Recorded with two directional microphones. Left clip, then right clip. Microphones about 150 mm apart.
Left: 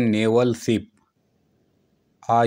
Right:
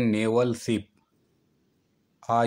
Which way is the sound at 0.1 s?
25° left (ahead or behind).